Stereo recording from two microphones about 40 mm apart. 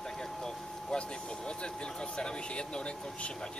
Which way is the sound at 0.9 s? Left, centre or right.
Left.